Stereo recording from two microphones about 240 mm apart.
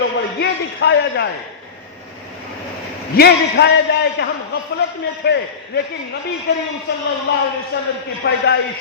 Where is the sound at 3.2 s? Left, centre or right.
Left.